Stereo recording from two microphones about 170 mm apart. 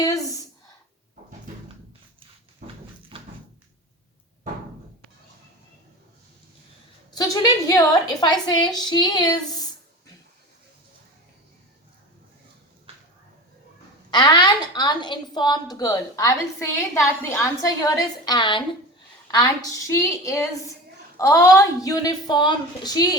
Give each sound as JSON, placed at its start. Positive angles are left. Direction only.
{"t": 0.0, "sound": "a sound", "side_deg": 20}
{"t": 7.1, "sound": "a woman's voice", "side_deg": 25}
{"t": 14.1, "sound": "a woman's voice", "side_deg": 25}
{"t": 19.7, "sound": "a woman's voice", "side_deg": 20}